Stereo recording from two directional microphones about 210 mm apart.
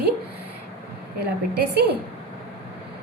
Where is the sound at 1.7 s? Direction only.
50° right (ahead or behind).